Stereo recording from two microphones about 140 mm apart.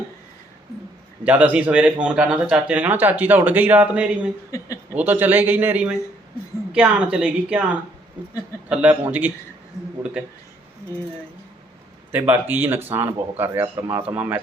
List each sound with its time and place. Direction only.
1.2 s speech: 10° right (ahead or behind)
4.5 s speech: 20° left (ahead or behind)
4.9 s speech: 15° right (ahead or behind)
12.1 s speech: 15° right (ahead or behind)